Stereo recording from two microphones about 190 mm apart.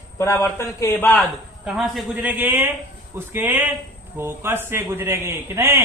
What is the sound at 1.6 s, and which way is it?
A man's voice, centre (ahead or behind).